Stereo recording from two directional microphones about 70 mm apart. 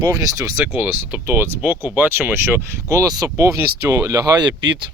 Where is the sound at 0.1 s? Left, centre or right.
Right.